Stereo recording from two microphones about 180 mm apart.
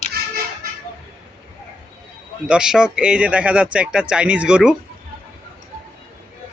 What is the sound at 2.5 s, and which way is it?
Speech, 5° right (ahead or behind).